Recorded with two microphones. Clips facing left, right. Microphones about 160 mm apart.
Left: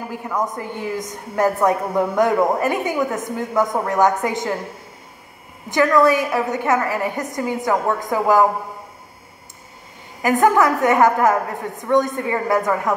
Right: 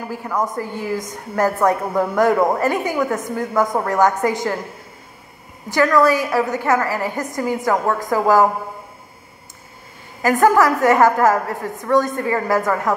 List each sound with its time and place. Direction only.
0.2 s a woman's voice: 20° left (ahead or behind)
5.7 s a woman's voice: 20° left (ahead or behind)
10.2 s a woman's voice: 20° left (ahead or behind)